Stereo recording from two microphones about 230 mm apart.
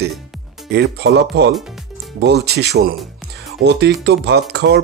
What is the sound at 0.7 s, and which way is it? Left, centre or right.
Speech, right.